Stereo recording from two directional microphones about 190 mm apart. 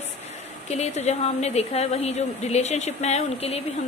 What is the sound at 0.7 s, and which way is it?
A woman's voice, 35° left (ahead or behind).